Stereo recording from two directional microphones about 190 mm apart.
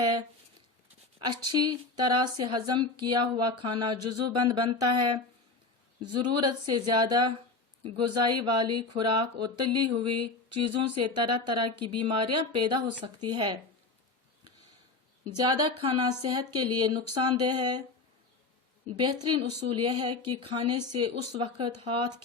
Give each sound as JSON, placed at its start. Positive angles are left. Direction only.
{"t": 0.0, "sound": "a sound", "side_deg": -20}
{"t": 1.2, "sound": "a woman's voice", "side_deg": -25}
{"t": 15.4, "sound": "a woman's voice", "side_deg": -25}
{"t": 18.9, "sound": "a woman's voice", "side_deg": -25}